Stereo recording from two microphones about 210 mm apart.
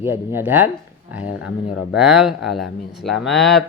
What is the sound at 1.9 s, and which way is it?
Speech, 5° right (ahead or behind).